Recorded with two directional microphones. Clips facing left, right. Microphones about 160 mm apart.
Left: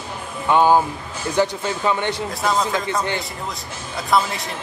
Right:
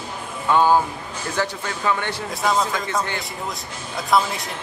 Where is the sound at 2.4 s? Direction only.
Centre (ahead or behind).